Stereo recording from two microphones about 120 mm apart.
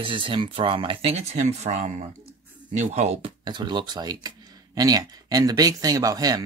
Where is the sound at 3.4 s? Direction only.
40° right (ahead or behind).